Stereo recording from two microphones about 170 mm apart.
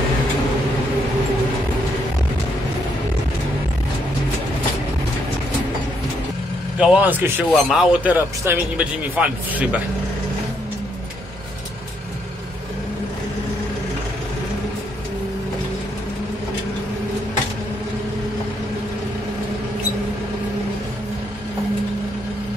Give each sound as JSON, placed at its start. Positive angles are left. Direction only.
{"t": 6.8, "sound": "a man's voice", "side_deg": -10}